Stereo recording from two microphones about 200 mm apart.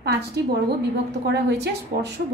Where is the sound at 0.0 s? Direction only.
55° right (ahead or behind).